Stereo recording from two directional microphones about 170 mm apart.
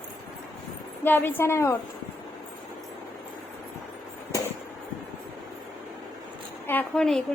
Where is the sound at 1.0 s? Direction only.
10° left (ahead or behind).